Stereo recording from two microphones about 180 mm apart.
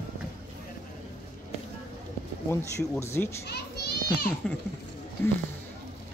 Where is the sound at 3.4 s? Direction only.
65° left (ahead or behind).